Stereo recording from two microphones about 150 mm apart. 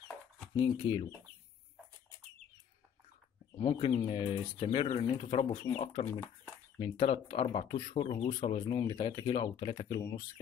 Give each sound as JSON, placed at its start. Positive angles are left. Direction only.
{"t": 0.6, "sound": "speech", "side_deg": 35}
{"t": 3.5, "sound": "speech", "side_deg": 35}